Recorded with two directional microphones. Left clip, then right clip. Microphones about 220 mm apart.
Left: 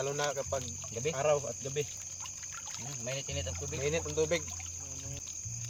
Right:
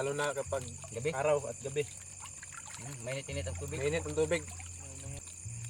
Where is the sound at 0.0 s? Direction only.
15° right (ahead or behind).